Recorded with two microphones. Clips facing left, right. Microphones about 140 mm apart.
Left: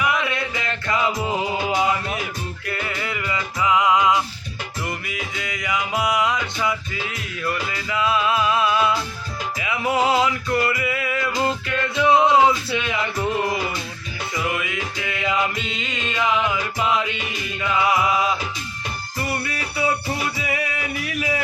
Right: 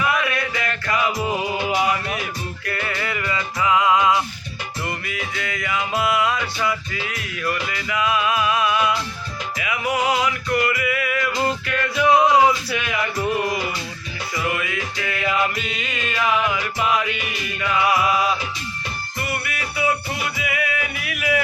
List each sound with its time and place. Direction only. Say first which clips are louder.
0.0 s music: right 1 dB; 20° left (ahead or behind)
19.3 s music: left 1 dB; 30° left (ahead or behind)